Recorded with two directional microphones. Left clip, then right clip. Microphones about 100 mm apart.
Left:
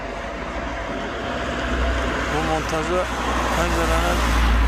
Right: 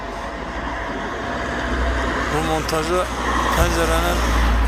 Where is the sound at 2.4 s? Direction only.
15° right (ahead or behind).